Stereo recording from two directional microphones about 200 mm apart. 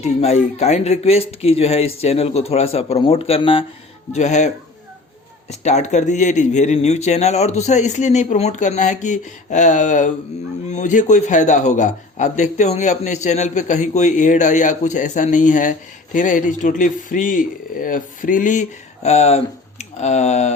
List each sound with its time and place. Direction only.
0.0 s a man's voice: 35° left (ahead or behind)